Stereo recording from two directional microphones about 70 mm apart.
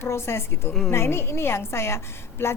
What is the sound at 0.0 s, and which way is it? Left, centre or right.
A woman's voice, left.